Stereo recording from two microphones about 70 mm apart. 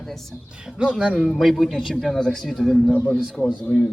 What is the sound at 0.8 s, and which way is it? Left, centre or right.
Speech, centre.